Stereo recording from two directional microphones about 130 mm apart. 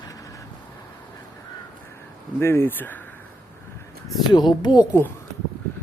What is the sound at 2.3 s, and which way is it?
Speech, 20° left (ahead or behind).